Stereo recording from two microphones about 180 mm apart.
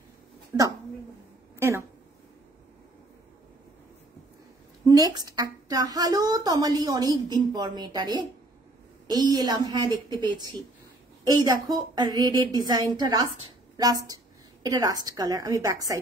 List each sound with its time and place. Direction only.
0.5 s a woman's voice: 10° right (ahead or behind)
4.8 s a woman's voice: 20° right (ahead or behind)